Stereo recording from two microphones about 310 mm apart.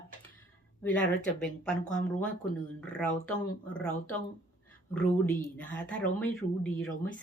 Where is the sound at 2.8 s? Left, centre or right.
Centre.